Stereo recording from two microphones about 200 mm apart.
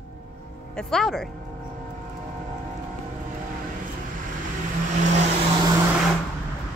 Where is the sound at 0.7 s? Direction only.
5° left (ahead or behind).